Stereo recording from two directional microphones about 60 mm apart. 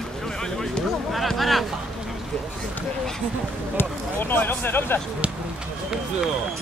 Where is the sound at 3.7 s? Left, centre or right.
Left.